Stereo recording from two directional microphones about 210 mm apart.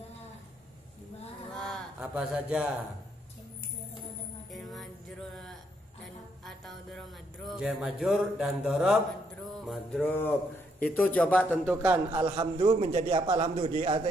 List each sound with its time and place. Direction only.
1.6 s a sound: centre (ahead or behind)
4.5 s music: centre (ahead or behind)
5.3 s a sound: centre (ahead or behind)
9.7 s music: centre (ahead or behind)
10.8 s a man's voice: 5° left (ahead or behind)
11.7 s a man's voice: 10° right (ahead or behind)
12.1 s a man's voice: 20° right (ahead or behind)